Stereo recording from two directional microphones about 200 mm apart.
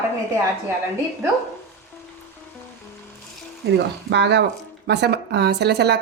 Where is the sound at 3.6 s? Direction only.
55° right (ahead or behind).